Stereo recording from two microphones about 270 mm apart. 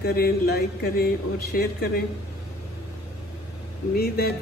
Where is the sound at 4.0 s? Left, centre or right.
Left.